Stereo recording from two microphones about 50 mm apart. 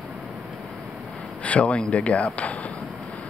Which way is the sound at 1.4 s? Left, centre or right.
Left.